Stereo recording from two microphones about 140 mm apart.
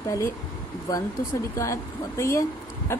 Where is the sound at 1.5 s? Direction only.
20° left (ahead or behind).